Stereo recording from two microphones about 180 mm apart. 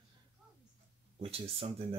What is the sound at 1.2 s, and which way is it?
Speech, 30° right (ahead or behind).